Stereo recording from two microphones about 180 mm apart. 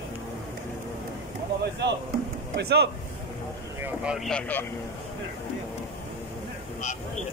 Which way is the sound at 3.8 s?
5° right (ahead or behind).